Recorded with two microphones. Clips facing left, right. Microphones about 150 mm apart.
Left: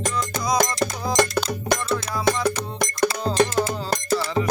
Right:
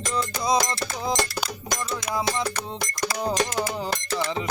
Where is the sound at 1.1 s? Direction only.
60° left (ahead or behind).